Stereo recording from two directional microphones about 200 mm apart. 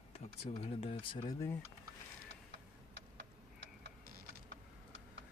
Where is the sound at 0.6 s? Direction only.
25° left (ahead or behind).